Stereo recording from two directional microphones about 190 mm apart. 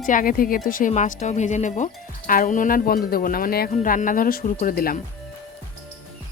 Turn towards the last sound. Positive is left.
turn(degrees=50)  # may be behind; listen again after turning